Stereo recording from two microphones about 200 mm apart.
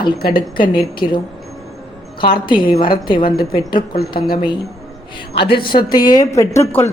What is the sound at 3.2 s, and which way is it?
Speech, 50° left (ahead or behind).